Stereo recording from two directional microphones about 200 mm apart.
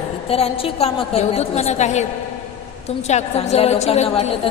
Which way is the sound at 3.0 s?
35° left (ahead or behind).